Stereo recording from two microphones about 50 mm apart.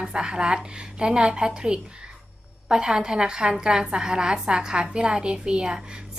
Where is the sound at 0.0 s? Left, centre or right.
Centre.